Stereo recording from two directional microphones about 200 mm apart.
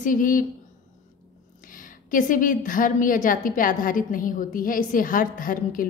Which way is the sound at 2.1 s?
40° left (ahead or behind).